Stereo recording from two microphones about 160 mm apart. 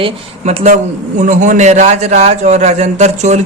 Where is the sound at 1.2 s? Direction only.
50° right (ahead or behind).